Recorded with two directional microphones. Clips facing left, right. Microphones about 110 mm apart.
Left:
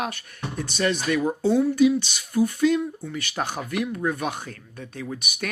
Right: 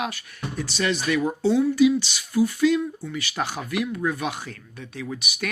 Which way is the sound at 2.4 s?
45° left (ahead or behind).